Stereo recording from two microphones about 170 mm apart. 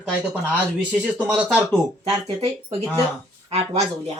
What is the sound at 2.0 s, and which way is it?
Speech, 35° right (ahead or behind).